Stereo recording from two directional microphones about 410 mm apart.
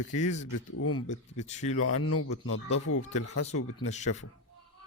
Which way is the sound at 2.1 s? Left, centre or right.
Left.